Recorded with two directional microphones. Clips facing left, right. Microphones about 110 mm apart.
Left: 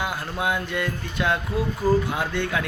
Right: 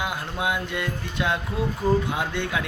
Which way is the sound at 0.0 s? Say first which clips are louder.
Left 1 dB; 20° right (ahead or behind).